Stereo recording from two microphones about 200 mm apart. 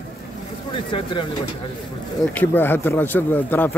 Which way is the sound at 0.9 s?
25° left (ahead or behind).